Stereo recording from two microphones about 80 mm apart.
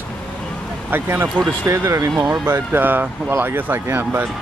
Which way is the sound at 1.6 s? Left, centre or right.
Right.